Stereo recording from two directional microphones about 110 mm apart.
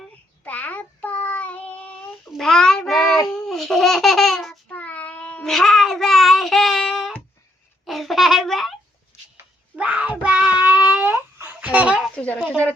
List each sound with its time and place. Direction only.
0.4 s child singing: 15° left (ahead or behind)
3.3 s laughter: 5° left (ahead or behind)
4.7 s cat: 15° left (ahead or behind)
5.5 s child singing: centre (ahead or behind)
7.9 s babbling: centre (ahead or behind)
9.1 s a sound: 25° left (ahead or behind)
9.7 s wail: 10° right (ahead or behind)
12.1 s a sound: 15° left (ahead or behind)